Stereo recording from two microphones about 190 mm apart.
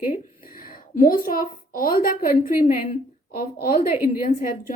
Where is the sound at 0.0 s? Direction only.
45° left (ahead or behind).